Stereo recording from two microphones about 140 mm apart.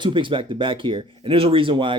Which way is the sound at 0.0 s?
35° right (ahead or behind).